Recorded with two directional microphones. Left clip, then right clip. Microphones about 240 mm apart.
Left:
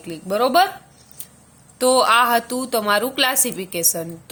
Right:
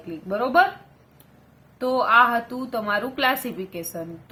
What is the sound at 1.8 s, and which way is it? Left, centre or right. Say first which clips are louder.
A woman's voice: left 3 dB; left.